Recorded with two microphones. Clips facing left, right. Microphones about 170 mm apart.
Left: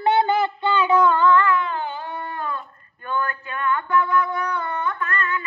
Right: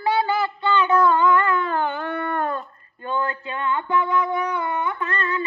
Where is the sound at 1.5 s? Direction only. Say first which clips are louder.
Right 1 dB; 45° right (ahead or behind).